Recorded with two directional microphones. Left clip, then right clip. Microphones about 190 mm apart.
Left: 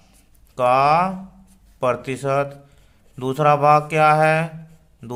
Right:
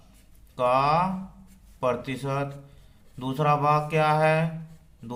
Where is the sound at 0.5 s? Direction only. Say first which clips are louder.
Left 6 dB; 45° left (ahead or behind).